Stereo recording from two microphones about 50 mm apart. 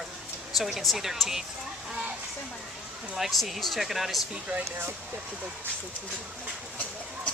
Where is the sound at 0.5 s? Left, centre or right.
Centre.